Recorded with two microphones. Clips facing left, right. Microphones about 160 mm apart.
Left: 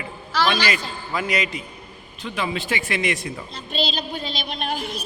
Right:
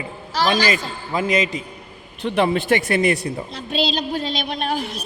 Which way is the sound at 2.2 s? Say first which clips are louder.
Right 8 dB; 60° right (ahead or behind).